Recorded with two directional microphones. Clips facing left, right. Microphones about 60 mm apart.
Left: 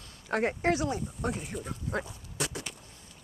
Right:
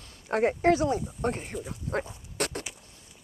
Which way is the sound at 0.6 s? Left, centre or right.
Right.